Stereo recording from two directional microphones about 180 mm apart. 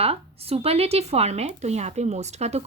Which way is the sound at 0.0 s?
35° right (ahead or behind).